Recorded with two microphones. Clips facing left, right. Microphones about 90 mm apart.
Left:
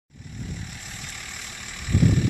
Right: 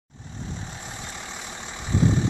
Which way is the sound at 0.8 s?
25° right (ahead or behind).